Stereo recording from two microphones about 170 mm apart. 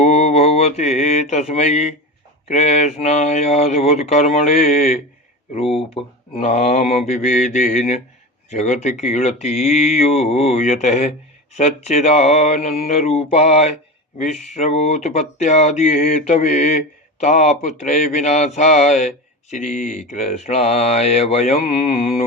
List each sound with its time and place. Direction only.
0.0 s mantra: 40° left (ahead or behind)
2.5 s speech: 40° left (ahead or behind)